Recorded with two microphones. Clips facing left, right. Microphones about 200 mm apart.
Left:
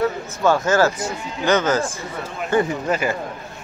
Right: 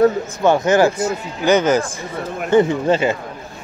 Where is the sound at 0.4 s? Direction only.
20° right (ahead or behind).